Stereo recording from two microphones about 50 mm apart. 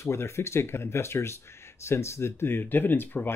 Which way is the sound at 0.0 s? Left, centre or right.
Left.